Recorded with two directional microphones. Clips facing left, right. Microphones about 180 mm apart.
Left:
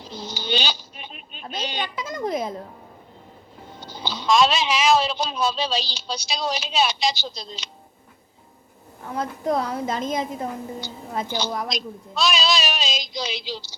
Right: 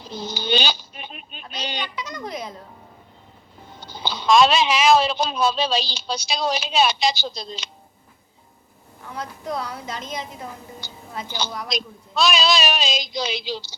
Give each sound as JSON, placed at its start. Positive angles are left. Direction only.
{"t": 0.2, "sound": "a sound", "side_deg": -55}
{"t": 1.5, "sound": "a sound", "side_deg": 50}
{"t": 2.2, "sound": "speech", "side_deg": 50}
{"t": 4.0, "sound": "speech", "side_deg": -55}
{"t": 9.0, "sound": "a woman's voice", "side_deg": 50}
{"t": 11.7, "sound": "speech", "side_deg": -55}